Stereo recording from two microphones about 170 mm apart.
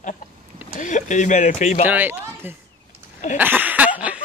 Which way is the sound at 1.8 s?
10° right (ahead or behind).